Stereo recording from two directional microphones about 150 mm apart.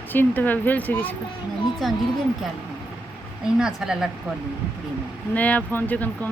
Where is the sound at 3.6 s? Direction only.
5° right (ahead or behind).